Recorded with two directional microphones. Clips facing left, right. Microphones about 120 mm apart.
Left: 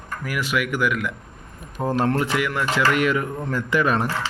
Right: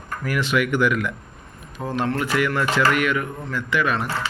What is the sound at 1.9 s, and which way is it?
Speech, 45° left (ahead or behind).